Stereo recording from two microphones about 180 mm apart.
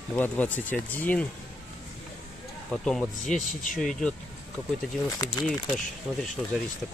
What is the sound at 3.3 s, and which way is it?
Speech, 45° left (ahead or behind).